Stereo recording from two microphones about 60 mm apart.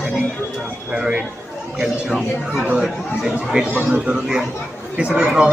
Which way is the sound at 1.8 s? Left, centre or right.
Centre.